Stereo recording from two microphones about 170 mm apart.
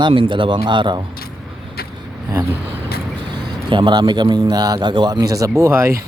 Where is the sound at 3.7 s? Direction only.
30° right (ahead or behind).